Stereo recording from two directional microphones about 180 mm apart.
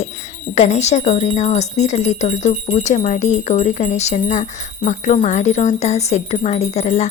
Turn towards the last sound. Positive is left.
turn(degrees=35)  # may be behind; listen again after turning